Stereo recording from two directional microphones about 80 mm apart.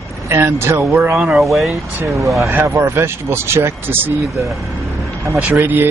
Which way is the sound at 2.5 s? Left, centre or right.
Right.